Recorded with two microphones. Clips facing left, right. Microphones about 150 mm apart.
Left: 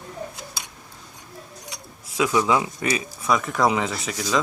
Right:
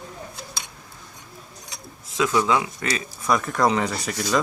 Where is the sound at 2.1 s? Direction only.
10° left (ahead or behind).